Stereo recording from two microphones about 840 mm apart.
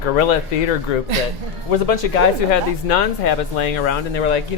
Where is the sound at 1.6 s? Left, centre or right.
Left.